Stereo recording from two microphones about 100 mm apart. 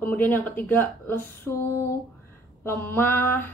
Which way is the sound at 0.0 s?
15° left (ahead or behind).